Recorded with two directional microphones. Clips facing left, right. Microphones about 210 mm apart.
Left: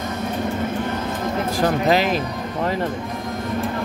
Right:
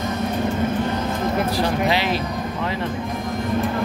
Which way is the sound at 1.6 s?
45° left (ahead or behind).